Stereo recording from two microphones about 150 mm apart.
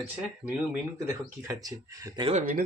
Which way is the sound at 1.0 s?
20° right (ahead or behind).